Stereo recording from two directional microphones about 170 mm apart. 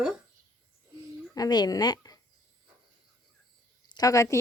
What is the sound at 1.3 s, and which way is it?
Speech, 25° left (ahead or behind).